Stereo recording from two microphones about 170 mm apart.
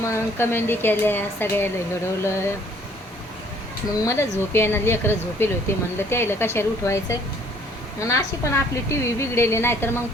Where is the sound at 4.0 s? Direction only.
15° left (ahead or behind).